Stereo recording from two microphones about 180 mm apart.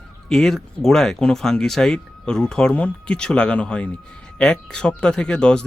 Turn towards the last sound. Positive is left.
turn(degrees=5)  # may be behind; listen again after turning